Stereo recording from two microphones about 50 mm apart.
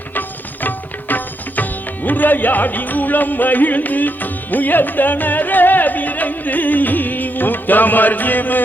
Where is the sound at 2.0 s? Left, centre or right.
Left.